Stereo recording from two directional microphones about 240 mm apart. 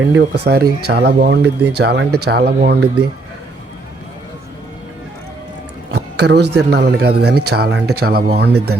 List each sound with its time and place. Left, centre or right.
0.1 s speech: right
5.9 s a man's voice: right